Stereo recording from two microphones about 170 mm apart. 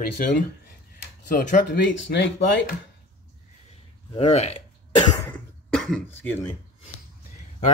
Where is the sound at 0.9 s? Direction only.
50° left (ahead or behind).